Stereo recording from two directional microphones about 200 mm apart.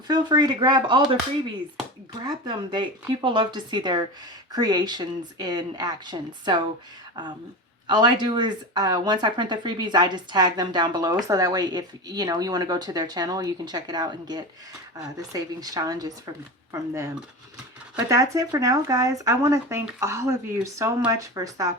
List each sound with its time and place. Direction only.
0.1 s speech: 20° right (ahead or behind)
2.1 s speech: 20° right (ahead or behind)
7.9 s speech: 20° right (ahead or behind)
18.1 s speech: 15° right (ahead or behind)